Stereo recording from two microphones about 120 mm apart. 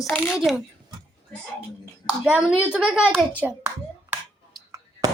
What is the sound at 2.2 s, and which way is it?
A woman's voice, 10° right (ahead or behind).